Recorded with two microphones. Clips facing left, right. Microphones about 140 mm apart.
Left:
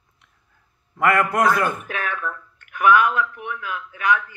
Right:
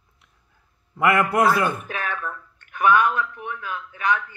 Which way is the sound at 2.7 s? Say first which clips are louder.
Left 1 dB; 25° right (ahead or behind).